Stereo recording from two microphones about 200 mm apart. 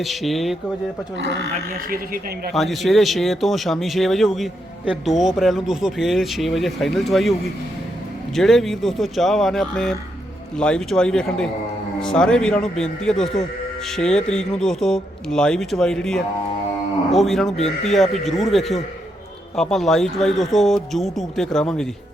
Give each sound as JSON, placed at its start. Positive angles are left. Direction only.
{"t": 0.0, "sound": "speech", "side_deg": 0}
{"t": 1.9, "sound": "speech", "side_deg": -45}
{"t": 2.5, "sound": "speech", "side_deg": 0}
{"t": 8.4, "sound": "speech", "side_deg": 0}